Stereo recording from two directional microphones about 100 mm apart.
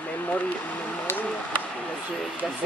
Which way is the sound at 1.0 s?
15° left (ahead or behind).